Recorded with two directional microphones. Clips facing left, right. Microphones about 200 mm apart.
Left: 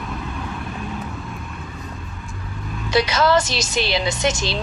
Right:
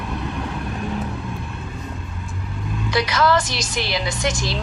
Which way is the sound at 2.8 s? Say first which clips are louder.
Left 2 dB; 25° left (ahead or behind).